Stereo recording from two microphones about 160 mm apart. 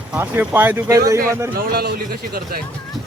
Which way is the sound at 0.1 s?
10° right (ahead or behind).